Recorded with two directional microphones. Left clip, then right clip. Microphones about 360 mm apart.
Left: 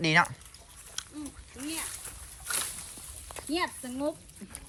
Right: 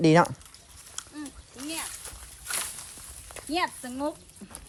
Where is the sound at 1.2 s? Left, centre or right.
Centre.